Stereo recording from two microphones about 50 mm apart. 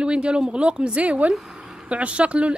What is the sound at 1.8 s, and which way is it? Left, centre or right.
Speech, right.